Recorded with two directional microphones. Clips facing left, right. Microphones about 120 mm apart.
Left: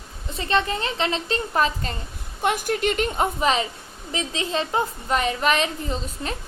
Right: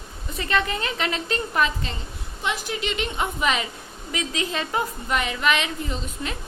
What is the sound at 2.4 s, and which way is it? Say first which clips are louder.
A woman's voice: left 6 dB; 50° left (ahead or behind).